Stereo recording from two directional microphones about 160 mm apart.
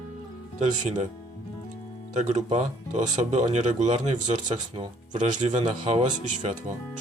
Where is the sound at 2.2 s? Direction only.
45° right (ahead or behind).